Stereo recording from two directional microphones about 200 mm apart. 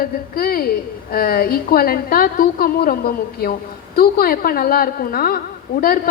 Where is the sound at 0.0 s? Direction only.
50° left (ahead or behind).